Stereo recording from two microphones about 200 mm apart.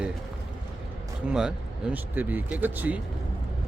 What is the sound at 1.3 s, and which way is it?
Speech, 5° right (ahead or behind).